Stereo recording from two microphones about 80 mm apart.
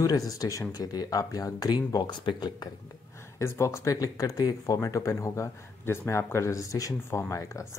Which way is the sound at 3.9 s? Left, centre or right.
Left.